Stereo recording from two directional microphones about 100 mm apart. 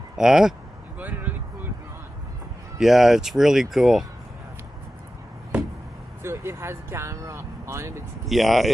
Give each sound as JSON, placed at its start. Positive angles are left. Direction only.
{"t": 0.2, "sound": "speech", "side_deg": -5}
{"t": 0.9, "sound": "a sound", "side_deg": -15}
{"t": 2.7, "sound": "speech", "side_deg": -5}
{"t": 6.2, "sound": "speech", "side_deg": -25}
{"t": 8.3, "sound": "speech", "side_deg": 0}